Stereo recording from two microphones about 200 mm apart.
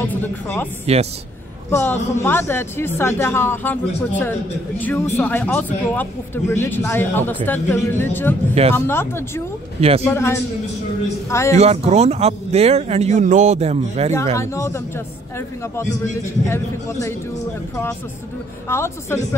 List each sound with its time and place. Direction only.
0.0 s speech: 10° left (ahead or behind)
0.9 s speech: 30° right (ahead or behind)
1.7 s speech: 10° left (ahead or behind)
9.8 s speech: 30° right (ahead or behind)
10.0 s speech: 15° left (ahead or behind)
11.5 s speech: 30° right (ahead or behind)
14.3 s speech: 15° left (ahead or behind)
18.7 s speech: 15° left (ahead or behind)